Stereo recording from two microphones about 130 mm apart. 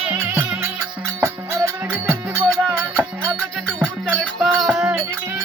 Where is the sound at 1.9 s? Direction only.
15° right (ahead or behind).